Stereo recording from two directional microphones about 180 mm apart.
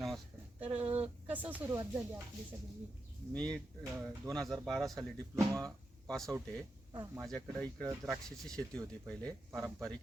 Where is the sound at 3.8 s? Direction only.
15° right (ahead or behind).